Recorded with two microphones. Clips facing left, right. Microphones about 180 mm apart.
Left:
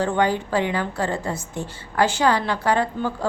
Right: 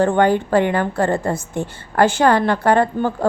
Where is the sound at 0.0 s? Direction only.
55° right (ahead or behind).